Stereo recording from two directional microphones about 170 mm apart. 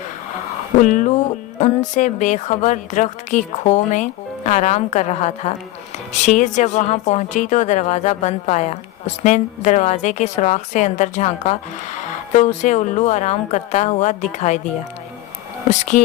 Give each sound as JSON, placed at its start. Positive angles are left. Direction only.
{"t": 0.8, "sound": "speech", "side_deg": 50}